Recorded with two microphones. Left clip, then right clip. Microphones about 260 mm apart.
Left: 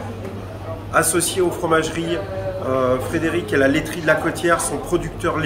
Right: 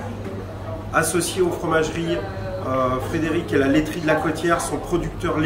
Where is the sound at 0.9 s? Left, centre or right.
Centre.